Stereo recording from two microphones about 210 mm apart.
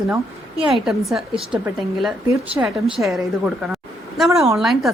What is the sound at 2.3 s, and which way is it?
Speech, 15° right (ahead or behind).